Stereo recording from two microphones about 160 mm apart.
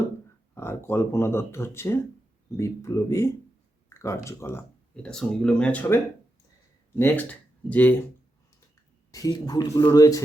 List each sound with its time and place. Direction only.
0.5 s speech: 15° left (ahead or behind)
5.0 s speech: 5° left (ahead or behind)
9.1 s speech: 25° left (ahead or behind)